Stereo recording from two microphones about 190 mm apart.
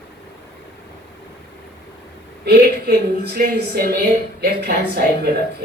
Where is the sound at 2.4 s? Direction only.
60° right (ahead or behind).